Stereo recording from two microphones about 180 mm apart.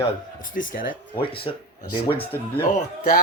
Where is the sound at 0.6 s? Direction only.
50° left (ahead or behind).